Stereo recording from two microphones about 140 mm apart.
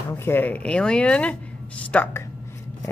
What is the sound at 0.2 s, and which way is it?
Speech, 15° left (ahead or behind).